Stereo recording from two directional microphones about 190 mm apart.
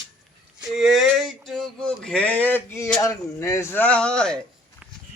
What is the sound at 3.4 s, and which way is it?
Speech, 15° left (ahead or behind).